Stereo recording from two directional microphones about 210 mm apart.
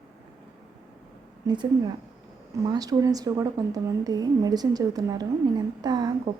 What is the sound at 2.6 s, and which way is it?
Speech, 15° right (ahead or behind).